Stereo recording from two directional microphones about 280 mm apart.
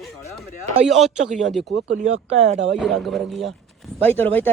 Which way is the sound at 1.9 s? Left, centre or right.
Right.